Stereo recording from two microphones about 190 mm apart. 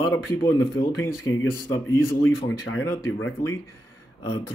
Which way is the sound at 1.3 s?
90° left.